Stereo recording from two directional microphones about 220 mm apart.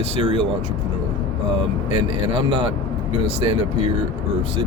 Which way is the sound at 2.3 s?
25° right (ahead or behind).